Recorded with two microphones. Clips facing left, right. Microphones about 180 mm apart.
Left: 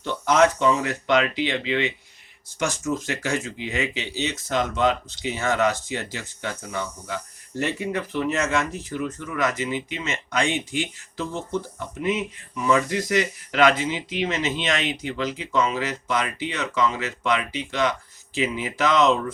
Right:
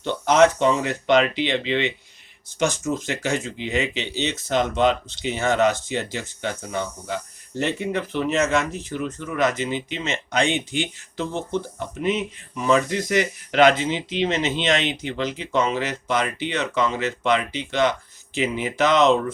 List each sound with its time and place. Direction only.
0.0 s speech: 25° right (ahead or behind)